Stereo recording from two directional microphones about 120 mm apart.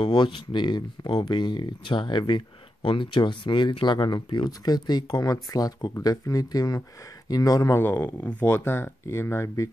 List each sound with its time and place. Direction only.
0.0 s speech: 40° left (ahead or behind)
7.8 s speech: 20° left (ahead or behind)